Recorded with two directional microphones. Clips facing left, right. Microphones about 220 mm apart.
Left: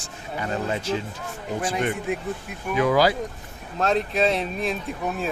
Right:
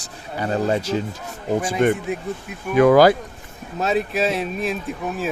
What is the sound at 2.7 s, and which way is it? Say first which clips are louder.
Speech: right 7 dB; 55° right (ahead or behind).